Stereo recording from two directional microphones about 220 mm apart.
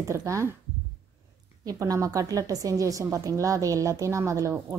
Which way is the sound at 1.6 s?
15° right (ahead or behind).